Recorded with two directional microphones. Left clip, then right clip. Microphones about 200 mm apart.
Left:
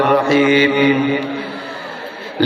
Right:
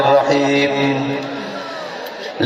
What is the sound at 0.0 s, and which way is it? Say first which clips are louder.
Mantra: right 1 dB; 15° left (ahead or behind).